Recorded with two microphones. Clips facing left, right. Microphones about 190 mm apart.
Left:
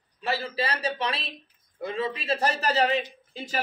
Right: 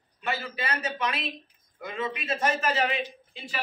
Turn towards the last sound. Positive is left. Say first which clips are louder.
# left 4 dB
turn(degrees=40)  # may be behind; listen again after turning